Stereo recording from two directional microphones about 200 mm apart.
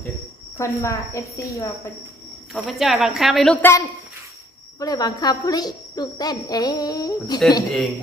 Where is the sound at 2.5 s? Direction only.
Centre (ahead or behind).